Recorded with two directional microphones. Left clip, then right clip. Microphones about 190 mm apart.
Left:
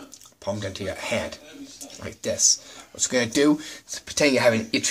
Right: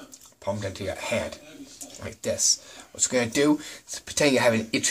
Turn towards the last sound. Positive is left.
turn(degrees=-5)  # may be behind; listen again after turning